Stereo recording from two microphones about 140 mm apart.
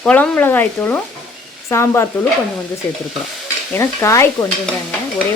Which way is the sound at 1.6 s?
20° left (ahead or behind).